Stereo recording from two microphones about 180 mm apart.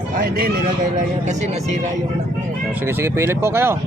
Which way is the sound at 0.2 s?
55° right (ahead or behind).